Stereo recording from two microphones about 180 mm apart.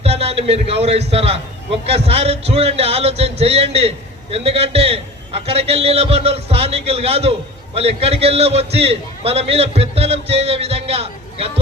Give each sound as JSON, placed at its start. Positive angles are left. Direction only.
{"t": 0.0, "sound": "a man's voice", "side_deg": -35}